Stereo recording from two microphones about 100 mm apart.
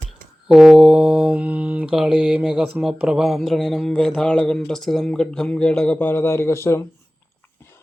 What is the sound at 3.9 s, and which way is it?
Speech, 5° left (ahead or behind).